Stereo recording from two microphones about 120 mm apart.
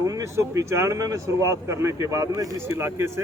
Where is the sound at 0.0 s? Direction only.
25° right (ahead or behind).